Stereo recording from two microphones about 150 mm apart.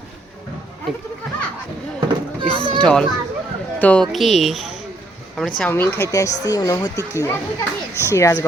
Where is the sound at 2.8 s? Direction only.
5° left (ahead or behind).